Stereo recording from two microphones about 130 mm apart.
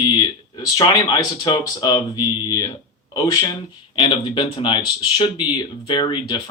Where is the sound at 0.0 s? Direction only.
30° left (ahead or behind).